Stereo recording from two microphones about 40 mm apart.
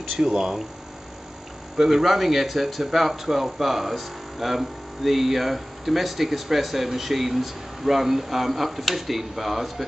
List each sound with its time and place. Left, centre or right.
0.1 s speech: centre
1.8 s speech: centre